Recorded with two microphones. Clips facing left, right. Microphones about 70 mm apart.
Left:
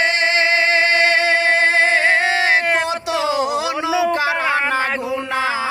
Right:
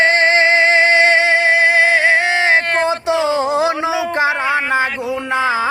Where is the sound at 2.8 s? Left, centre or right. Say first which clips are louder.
Right 4 dB; right.